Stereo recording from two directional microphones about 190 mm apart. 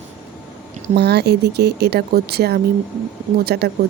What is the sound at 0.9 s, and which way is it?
A woman's voice, 60° right (ahead or behind).